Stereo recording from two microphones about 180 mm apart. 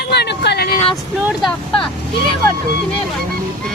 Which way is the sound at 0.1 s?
65° left (ahead or behind).